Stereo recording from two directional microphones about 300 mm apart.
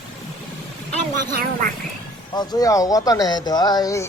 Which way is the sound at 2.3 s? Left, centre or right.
Centre.